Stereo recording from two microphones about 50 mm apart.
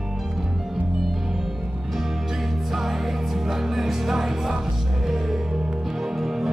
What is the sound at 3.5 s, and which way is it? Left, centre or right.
Music, centre.